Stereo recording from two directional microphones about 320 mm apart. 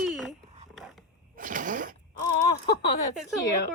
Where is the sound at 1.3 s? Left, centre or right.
Right.